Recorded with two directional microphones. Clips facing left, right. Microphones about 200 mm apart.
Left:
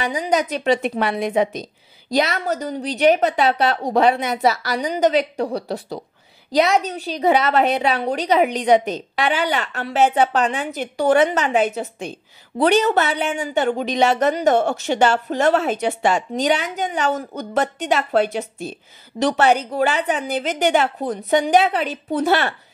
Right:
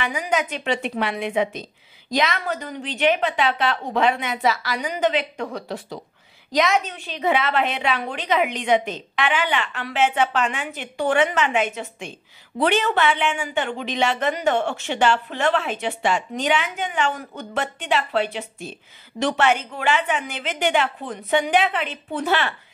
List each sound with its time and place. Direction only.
0.0 s speech: 35° left (ahead or behind)